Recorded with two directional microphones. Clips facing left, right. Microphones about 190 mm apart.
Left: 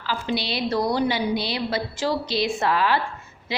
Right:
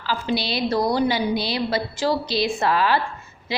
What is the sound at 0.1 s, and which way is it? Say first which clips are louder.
A woman's voice: right 2 dB; 35° right (ahead or behind).